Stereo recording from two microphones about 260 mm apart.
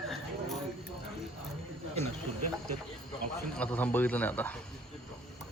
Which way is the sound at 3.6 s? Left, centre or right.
Centre.